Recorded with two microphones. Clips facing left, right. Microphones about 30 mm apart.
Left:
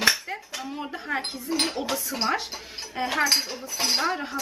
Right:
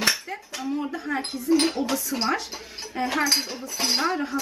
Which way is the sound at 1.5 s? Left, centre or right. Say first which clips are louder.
Right 7 dB; centre.